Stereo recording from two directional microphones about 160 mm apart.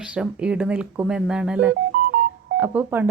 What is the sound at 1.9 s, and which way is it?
Music, 65° right (ahead or behind).